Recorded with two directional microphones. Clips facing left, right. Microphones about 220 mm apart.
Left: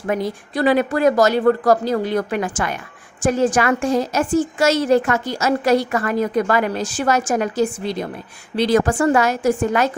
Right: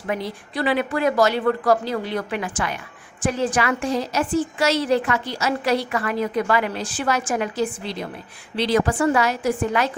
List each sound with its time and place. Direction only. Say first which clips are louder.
0.1 s a woman's voice: left 5 dB; 45° left (ahead or behind)